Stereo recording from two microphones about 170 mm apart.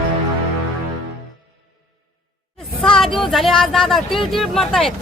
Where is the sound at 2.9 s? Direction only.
Centre (ahead or behind).